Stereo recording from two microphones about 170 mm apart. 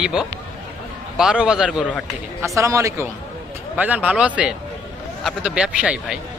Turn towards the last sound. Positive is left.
turn(degrees=-5)  # may be behind; listen again after turning